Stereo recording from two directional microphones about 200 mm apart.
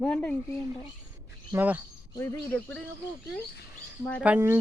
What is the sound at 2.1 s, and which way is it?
Speech, 10° left (ahead or behind).